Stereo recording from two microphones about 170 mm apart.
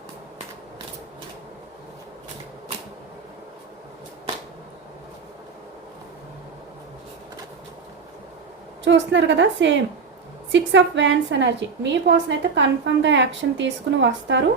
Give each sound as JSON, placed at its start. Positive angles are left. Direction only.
{"t": 8.8, "sound": "a woman's voice", "side_deg": -90}